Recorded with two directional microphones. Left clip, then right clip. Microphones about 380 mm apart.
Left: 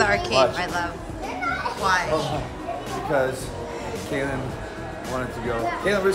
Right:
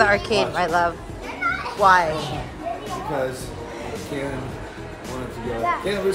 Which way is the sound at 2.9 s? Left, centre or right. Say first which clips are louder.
Left 4 dB; centre.